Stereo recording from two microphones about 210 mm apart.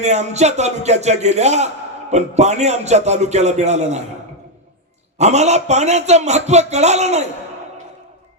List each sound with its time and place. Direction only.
0.0 s a man's voice: 30° right (ahead or behind)
5.1 s a man's voice: 30° right (ahead or behind)